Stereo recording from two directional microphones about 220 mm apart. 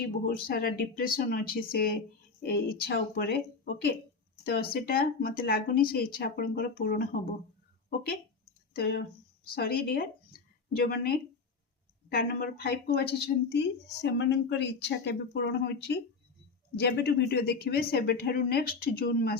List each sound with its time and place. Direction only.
0.3 s speech: 40° left (ahead or behind)
8.7 s speech: 45° left (ahead or behind)